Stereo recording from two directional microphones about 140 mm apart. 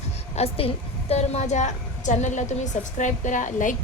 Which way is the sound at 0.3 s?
45° left (ahead or behind).